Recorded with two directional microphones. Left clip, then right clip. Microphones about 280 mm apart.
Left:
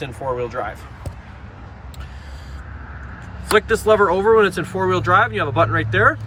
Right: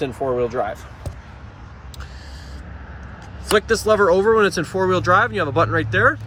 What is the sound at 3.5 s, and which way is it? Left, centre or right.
Speech, centre.